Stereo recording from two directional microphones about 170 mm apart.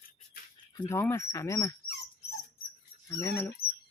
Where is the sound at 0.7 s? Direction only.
25° left (ahead or behind).